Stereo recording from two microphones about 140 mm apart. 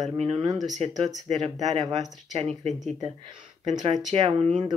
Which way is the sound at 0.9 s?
25° right (ahead or behind).